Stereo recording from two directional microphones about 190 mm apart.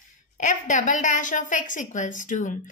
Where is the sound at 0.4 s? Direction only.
40° left (ahead or behind).